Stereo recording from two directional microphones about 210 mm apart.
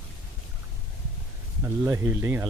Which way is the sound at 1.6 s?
10° right (ahead or behind).